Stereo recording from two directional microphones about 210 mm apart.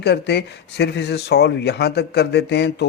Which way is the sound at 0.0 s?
50° left (ahead or behind).